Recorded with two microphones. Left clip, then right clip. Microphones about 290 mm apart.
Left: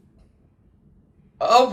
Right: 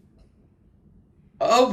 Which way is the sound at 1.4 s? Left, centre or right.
Centre.